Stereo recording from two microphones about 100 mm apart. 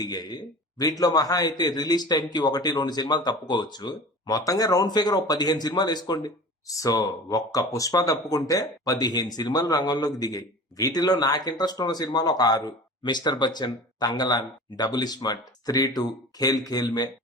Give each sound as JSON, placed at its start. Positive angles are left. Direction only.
{"t": 0.0, "sound": "a man's voice", "side_deg": 40}